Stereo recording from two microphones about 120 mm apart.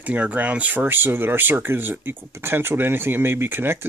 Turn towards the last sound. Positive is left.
turn(degrees=-20)  # may be behind; listen again after turning